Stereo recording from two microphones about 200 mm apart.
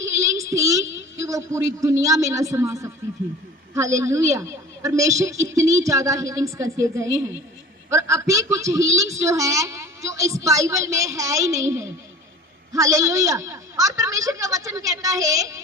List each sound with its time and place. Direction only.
0.0 s child singing: 15° right (ahead or behind)
1.2 s a woman's voice: 15° right (ahead or behind)